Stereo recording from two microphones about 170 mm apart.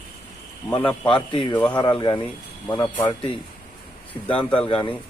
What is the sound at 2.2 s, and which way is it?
Speech, 10° left (ahead or behind).